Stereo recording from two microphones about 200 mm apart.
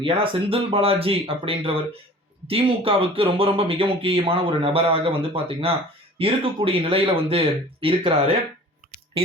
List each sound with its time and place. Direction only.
0.0 s speech: 25° right (ahead or behind)